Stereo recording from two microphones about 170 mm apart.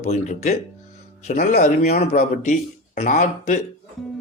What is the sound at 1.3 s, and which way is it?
Speech, 55° left (ahead or behind).